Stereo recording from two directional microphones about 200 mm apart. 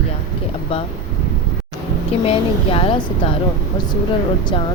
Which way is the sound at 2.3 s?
30° left (ahead or behind).